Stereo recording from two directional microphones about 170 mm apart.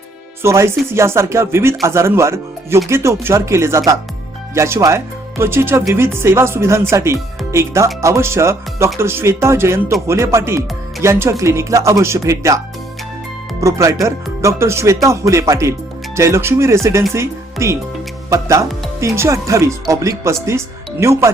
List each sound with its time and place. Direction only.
0.4 s speech: 15° right (ahead or behind)
13.6 s speech: 15° right (ahead or behind)